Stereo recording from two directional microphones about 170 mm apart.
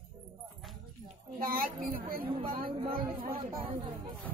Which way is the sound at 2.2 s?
35° right (ahead or behind).